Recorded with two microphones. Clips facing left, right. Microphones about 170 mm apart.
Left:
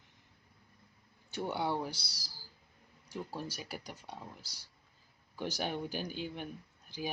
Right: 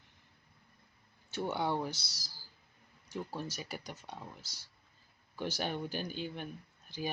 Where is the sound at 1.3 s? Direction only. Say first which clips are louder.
Right 1 dB; 10° left (ahead or behind).